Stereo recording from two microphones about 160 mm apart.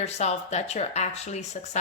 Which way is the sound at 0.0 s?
45° left (ahead or behind).